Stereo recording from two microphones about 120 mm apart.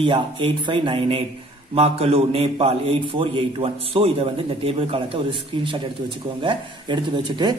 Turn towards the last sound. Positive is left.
turn(degrees=-40)  # may be behind; listen again after turning